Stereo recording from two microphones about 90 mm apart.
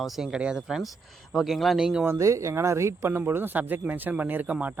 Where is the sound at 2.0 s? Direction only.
30° right (ahead or behind).